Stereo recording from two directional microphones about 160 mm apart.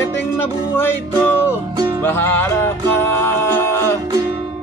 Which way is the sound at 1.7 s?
25° right (ahead or behind).